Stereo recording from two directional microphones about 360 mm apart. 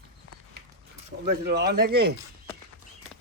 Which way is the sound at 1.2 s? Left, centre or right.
Right.